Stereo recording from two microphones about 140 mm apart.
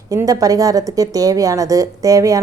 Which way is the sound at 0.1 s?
25° right (ahead or behind).